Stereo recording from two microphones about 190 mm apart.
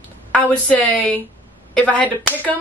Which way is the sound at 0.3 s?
5° left (ahead or behind).